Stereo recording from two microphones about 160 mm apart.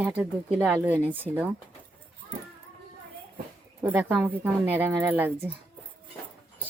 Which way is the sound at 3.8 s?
10° right (ahead or behind).